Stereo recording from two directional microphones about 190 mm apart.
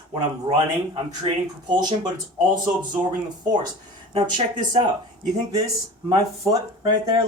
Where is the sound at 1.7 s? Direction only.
20° right (ahead or behind).